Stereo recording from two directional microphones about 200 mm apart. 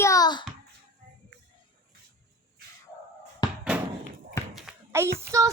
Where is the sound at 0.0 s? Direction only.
15° left (ahead or behind).